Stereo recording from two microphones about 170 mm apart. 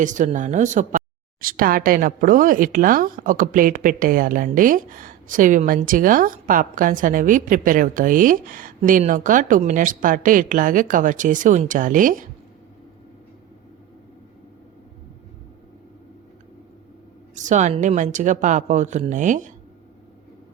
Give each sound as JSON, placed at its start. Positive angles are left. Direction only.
{"t": 0.0, "sound": "a woman's voice", "side_deg": -45}
{"t": 17.3, "sound": "a woman's voice", "side_deg": -45}